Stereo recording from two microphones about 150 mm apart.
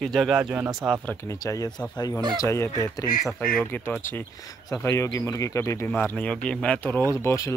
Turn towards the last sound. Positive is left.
turn(degrees=20)  # may be behind; listen again after turning